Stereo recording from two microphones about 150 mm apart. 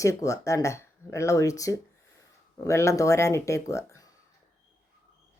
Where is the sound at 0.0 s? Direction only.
20° left (ahead or behind).